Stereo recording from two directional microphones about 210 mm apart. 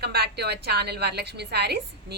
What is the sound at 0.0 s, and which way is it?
A woman's voice, 50° right (ahead or behind).